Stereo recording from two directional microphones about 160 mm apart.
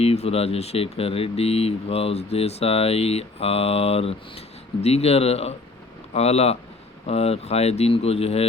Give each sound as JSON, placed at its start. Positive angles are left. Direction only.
{"t": 0.0, "sound": "speech", "side_deg": 40}